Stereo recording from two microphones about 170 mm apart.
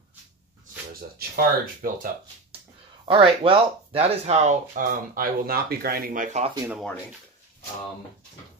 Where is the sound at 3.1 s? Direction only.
35° right (ahead or behind).